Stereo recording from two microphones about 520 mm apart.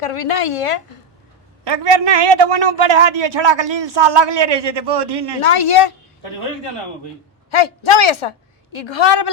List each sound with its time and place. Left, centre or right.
0.0 s a woman's voice: left
1.6 s a man's voice: right
5.5 s a woman's voice: left
7.5 s a woman's voice: left